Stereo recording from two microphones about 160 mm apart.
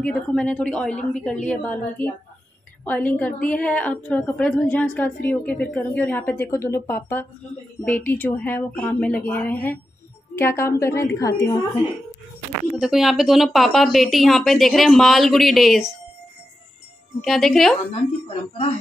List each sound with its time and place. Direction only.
0.0 s a woman's voice: 5° left (ahead or behind)
12.7 s a woman's voice: 5° right (ahead or behind)
17.2 s a woman's voice: centre (ahead or behind)